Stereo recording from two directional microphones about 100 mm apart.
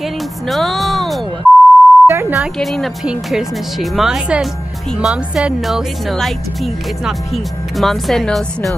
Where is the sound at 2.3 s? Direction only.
Centre (ahead or behind).